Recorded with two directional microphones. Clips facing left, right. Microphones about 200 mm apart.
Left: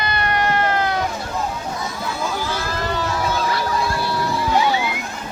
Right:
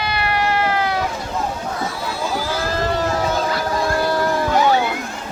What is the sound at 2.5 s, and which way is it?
Boat, 45° right (ahead or behind).